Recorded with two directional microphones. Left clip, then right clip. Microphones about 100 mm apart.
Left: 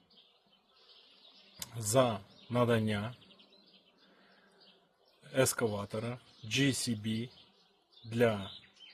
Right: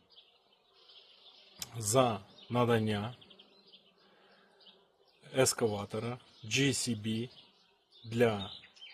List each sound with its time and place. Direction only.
1.5 s speech: 20° right (ahead or behind)
5.3 s speech: 20° right (ahead or behind)